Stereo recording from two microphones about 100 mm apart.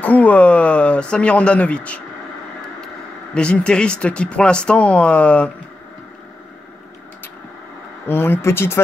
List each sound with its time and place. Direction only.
0.0 s speech: 15° left (ahead or behind)
3.3 s speech: 10° left (ahead or behind)
8.1 s speech: 25° left (ahead or behind)